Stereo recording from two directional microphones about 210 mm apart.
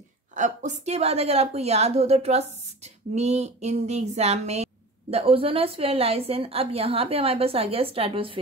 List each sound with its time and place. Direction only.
0.3 s a woman's voice: 35° right (ahead or behind)